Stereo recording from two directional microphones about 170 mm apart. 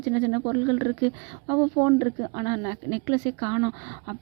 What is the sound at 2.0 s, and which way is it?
Speech, 20° right (ahead or behind).